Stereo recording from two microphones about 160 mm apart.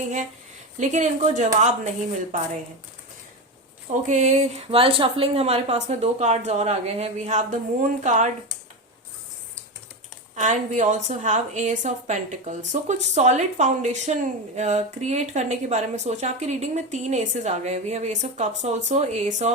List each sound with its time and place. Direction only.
0.8 s a woman's voice: 50° right (ahead or behind)
3.8 s a woman's voice: 50° right (ahead or behind)
10.3 s a woman's voice: 50° right (ahead or behind)